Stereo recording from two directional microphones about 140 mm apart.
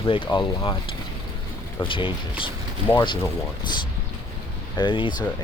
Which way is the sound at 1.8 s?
40° left (ahead or behind).